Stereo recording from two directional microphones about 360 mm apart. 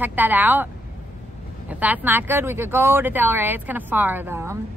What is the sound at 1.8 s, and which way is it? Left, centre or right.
Speech, centre.